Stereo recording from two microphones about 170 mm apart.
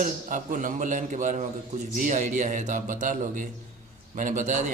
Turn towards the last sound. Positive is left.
turn(degrees=-45)  # may be behind; listen again after turning